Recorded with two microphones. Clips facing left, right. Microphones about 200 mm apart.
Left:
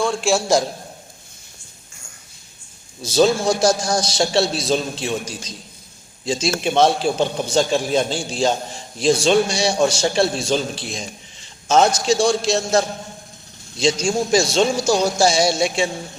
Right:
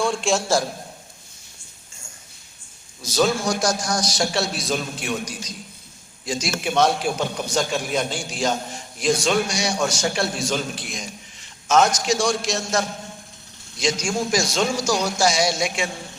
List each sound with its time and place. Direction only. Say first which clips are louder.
0.0 s a man's voice: left 2 dB; centre (ahead or behind)
3.0 s a man's voice: left 5 dB; 30° left (ahead or behind)